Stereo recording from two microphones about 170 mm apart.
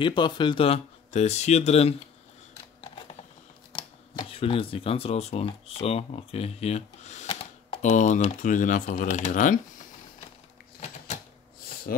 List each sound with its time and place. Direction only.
0.0 s speech: 25° left (ahead or behind)
3.7 s speech: 30° left (ahead or behind); by 9.6 s 50° left (ahead or behind)